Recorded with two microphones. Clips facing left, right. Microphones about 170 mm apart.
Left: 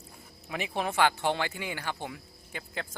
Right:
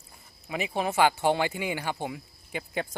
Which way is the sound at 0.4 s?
Centre (ahead or behind).